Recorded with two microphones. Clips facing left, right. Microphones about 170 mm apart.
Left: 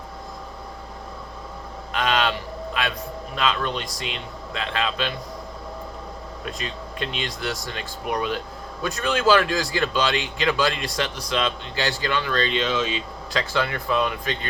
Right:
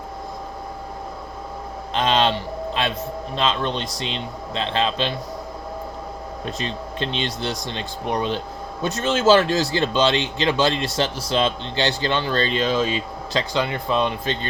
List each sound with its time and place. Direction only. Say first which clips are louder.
1.9 s a sound: right 3 dB; 25° right (ahead or behind)
3.3 s speech: right 2 dB; 25° right (ahead or behind)
6.4 s speech: right 4 dB; 30° right (ahead or behind)
13.3 s speech: right 2 dB; 20° right (ahead or behind)